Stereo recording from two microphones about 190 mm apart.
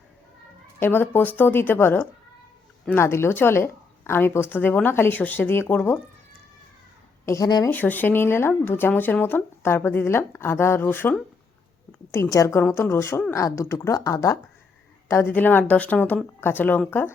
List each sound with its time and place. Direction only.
0.8 s speech: 10° left (ahead or behind)
7.3 s speech: 20° left (ahead or behind)
7.7 s speech: 10° left (ahead or behind)